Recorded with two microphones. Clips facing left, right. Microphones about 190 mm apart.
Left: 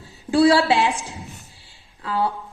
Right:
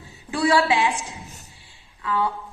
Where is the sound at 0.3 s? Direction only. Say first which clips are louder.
Left 4 dB; 35° left (ahead or behind).